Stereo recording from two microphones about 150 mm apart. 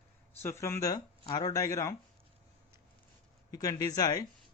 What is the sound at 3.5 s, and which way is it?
Speech, 25° left (ahead or behind).